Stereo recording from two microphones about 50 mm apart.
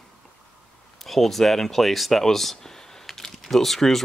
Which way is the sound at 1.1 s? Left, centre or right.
Centre.